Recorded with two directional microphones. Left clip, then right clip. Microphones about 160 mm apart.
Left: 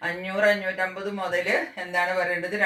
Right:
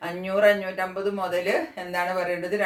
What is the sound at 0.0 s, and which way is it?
Speech, 30° right (ahead or behind).